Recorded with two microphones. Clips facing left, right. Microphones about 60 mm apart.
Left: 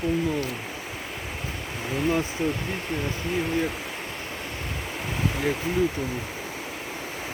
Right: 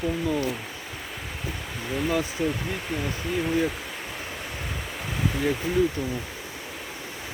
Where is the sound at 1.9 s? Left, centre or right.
Centre.